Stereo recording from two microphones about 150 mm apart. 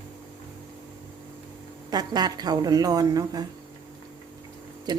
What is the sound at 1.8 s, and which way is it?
A woman's voice, 25° right (ahead or behind).